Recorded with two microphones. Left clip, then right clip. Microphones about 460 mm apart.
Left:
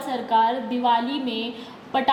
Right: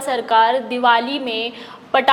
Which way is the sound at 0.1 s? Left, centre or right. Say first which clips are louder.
Right 6 dB; right.